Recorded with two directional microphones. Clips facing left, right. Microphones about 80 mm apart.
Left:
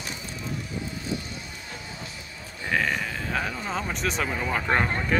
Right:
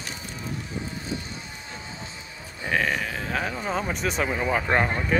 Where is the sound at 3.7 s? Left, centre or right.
Centre.